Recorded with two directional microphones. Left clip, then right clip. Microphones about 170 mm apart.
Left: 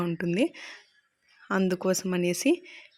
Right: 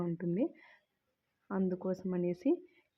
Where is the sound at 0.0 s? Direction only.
30° left (ahead or behind).